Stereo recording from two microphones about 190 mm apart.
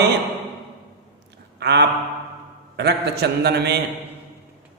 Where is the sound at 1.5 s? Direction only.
65° right (ahead or behind).